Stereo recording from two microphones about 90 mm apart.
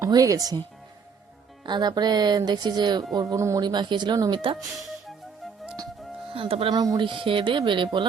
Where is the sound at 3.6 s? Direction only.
55° right (ahead or behind).